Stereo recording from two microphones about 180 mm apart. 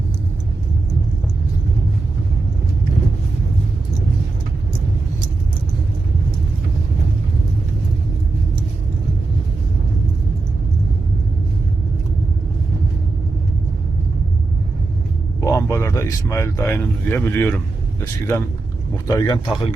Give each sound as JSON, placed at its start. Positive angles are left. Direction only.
{"t": 15.4, "sound": "a man's voice", "side_deg": 20}